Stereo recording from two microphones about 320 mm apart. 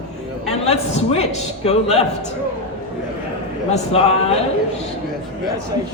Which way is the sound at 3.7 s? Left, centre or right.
Centre.